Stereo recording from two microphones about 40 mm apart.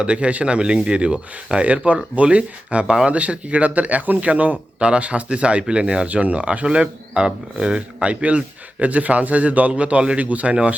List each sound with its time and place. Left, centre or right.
0.0 s speech: right
6.1 s speech: right
8.0 s speech: right